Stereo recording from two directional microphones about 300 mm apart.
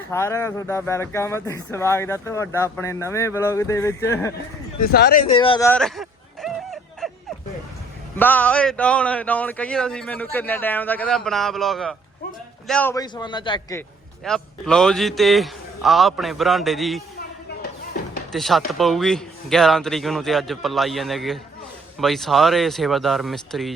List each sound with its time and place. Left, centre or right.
0.1 s speech: centre
4.8 s speech: left
5.3 s a sound: centre
8.1 s a man's voice: centre
14.3 s a man's voice: centre
18.3 s a man's voice: centre